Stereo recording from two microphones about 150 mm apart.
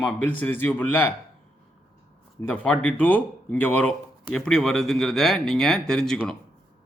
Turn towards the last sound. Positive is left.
turn(degrees=5)  # may be behind; listen again after turning